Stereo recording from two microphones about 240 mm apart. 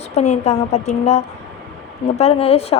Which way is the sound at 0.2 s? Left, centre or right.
Left.